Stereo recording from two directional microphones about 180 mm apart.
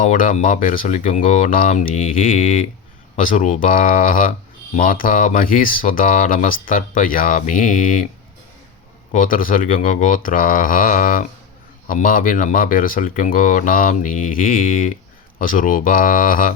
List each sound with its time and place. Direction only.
0.0 s speech: 45° left (ahead or behind)
9.1 s speech: 50° left (ahead or behind)